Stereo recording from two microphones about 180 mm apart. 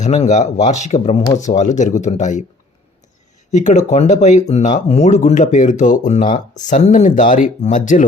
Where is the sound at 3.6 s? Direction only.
40° left (ahead or behind).